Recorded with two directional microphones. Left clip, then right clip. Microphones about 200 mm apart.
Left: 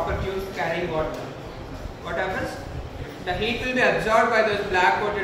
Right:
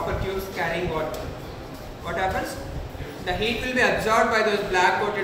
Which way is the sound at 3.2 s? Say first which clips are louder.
Even; 20° right (ahead or behind).